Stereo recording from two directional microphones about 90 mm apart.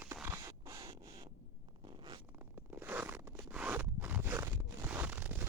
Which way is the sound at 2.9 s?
25° right (ahead or behind).